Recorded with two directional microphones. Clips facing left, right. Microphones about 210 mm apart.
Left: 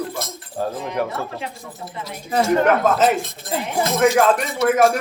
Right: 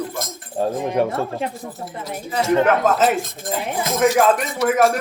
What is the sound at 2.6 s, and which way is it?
Speech, centre (ahead or behind).